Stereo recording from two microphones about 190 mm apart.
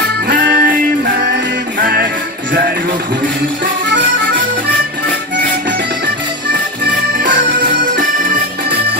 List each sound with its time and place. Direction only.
0.3 s music: 50° right (ahead or behind)
7.3 s music: 70° right (ahead or behind)